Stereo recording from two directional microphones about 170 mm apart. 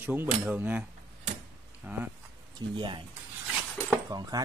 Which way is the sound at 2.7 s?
30° right (ahead or behind).